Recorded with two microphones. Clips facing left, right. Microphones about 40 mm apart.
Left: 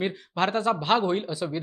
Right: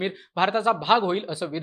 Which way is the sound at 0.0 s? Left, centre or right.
Centre.